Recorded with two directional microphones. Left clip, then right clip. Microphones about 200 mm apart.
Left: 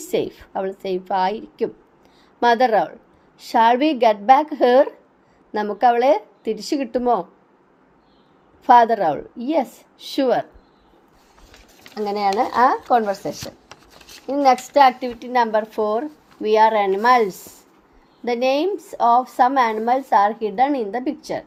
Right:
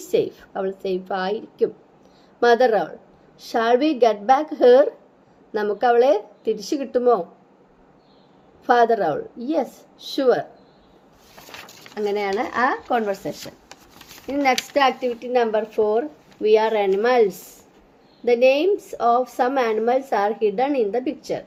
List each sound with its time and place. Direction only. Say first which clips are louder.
0.0 s speech: right 1 dB; 25° left (ahead or behind)
8.6 s speech: left 4 dB; 25° left (ahead or behind)
11.9 s a woman's voice: left 3 dB; 15° left (ahead or behind)
14.3 s a woman's voice: left 4 dB; 15° left (ahead or behind)